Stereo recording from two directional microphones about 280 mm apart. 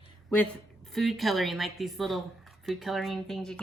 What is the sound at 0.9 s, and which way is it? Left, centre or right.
A woman's voice, centre.